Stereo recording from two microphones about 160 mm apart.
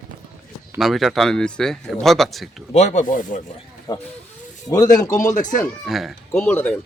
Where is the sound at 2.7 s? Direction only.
45° left (ahead or behind).